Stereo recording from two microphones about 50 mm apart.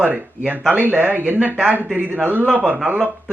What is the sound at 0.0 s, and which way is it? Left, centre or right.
Speech, right.